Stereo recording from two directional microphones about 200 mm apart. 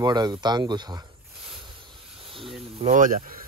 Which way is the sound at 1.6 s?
25° right (ahead or behind).